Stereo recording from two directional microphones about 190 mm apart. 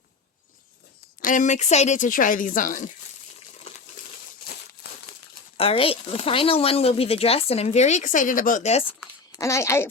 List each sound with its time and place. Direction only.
1.2 s speech: 45° left (ahead or behind)
5.5 s speech: 30° left (ahead or behind)
9.3 s speech: 15° left (ahead or behind)